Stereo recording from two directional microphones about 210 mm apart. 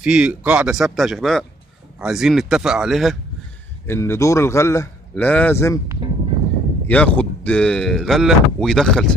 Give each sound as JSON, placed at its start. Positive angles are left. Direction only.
{"t": 0.0, "sound": "speech", "side_deg": -5}
{"t": 3.8, "sound": "a man's voice", "side_deg": 10}
{"t": 6.0, "sound": "a sound", "side_deg": -25}
{"t": 6.9, "sound": "speech", "side_deg": 5}